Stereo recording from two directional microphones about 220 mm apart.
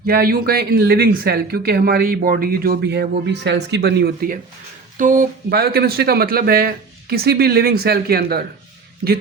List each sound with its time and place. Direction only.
0.0 s speech: 40° right (ahead or behind)